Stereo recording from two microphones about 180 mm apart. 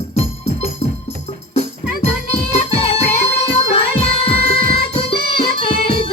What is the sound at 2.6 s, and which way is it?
Music, 35° left (ahead or behind).